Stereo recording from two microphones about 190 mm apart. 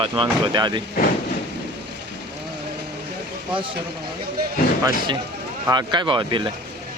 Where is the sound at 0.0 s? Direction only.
25° right (ahead or behind).